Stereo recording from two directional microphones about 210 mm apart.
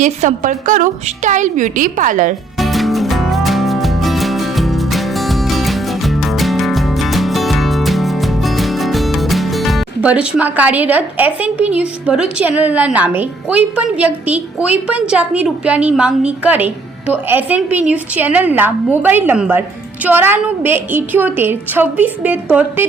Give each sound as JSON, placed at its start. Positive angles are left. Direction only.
{"t": 0.0, "sound": "a woman's voice", "side_deg": -35}
{"t": 2.6, "sound": "music", "side_deg": 0}
{"t": 20.1, "sound": "a woman's voice", "side_deg": -10}